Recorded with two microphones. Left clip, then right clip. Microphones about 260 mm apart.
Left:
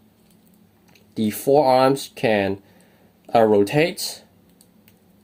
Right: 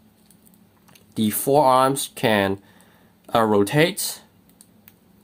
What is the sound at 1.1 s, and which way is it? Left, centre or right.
Speech, centre.